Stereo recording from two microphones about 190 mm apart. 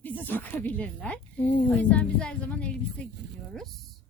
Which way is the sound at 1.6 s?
5° left (ahead or behind).